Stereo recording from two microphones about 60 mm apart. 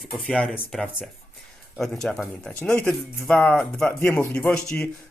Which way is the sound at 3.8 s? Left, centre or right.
Left.